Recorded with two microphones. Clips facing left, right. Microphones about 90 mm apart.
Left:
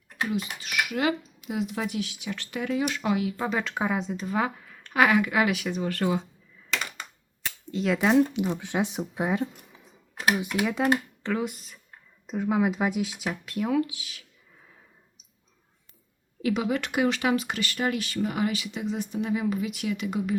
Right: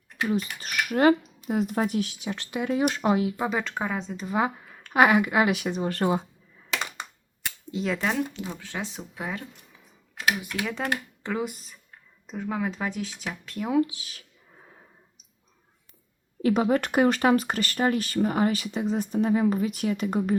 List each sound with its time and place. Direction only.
0.3 s speech: 40° right (ahead or behind)
2.3 s speech: 20° right (ahead or behind)
2.6 s speech: 35° right (ahead or behind)
3.5 s speech: centre (ahead or behind)
4.4 s speech: 20° right (ahead or behind)
7.7 s speech: 5° right (ahead or behind)
7.9 s speech: 5° left (ahead or behind)
8.5 s speech: 20° left (ahead or behind)
11.2 s speech: 5° right (ahead or behind)
13.7 s speech: 30° right (ahead or behind)
16.4 s speech: 40° right (ahead or behind)